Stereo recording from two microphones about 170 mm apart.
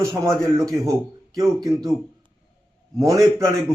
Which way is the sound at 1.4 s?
20° right (ahead or behind).